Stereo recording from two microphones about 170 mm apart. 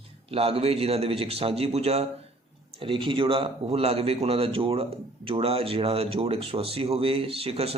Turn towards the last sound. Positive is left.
turn(degrees=-35)  # may be behind; listen again after turning